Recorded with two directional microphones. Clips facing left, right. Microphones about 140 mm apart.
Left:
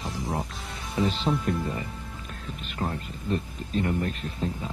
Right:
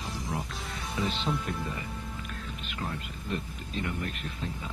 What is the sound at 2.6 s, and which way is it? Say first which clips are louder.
Speech: left 6 dB; 40° left (ahead or behind).